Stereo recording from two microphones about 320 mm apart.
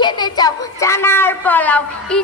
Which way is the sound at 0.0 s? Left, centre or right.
Centre.